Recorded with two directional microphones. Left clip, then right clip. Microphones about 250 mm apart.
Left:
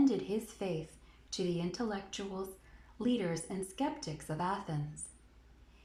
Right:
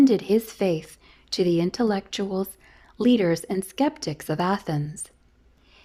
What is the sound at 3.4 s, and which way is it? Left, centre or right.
A woman's voice, right.